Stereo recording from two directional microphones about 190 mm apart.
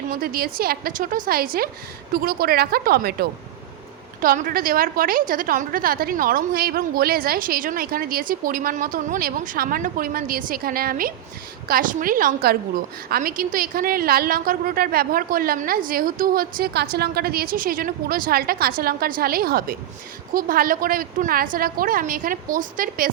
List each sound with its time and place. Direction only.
0.1 s a woman's voice: 50° right (ahead or behind)